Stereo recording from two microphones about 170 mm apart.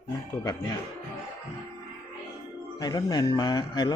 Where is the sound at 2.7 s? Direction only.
25° left (ahead or behind).